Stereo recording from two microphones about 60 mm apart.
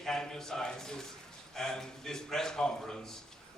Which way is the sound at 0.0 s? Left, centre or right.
Centre.